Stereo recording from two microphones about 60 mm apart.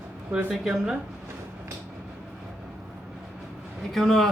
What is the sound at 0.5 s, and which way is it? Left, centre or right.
Speech, centre.